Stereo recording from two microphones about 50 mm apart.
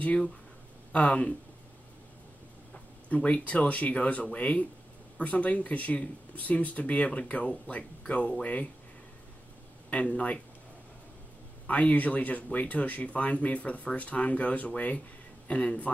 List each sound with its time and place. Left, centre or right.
0.0 s speech: left
3.3 s speech: left
9.8 s speech: left
11.6 s speech: left